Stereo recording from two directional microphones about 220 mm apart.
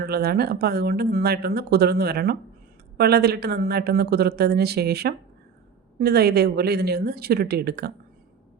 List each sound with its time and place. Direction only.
0.0 s speech: 45° right (ahead or behind)